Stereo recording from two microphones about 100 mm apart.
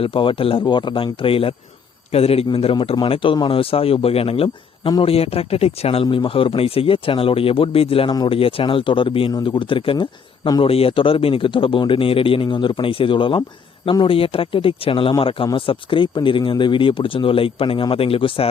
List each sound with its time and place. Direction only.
0.0 s speech: 60° left (ahead or behind)
0.6 s speech: 50° left (ahead or behind); by 1.5 s 65° left (ahead or behind)
2.1 s a man's voice: 85° left
3.1 s speech: 60° left (ahead or behind)
10.6 s speech: 70° left (ahead or behind)